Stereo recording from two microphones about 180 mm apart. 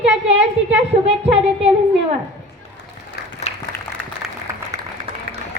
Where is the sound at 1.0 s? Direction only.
35° right (ahead or behind).